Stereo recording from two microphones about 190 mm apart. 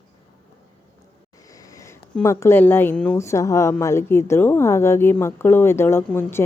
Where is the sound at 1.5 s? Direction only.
20° left (ahead or behind).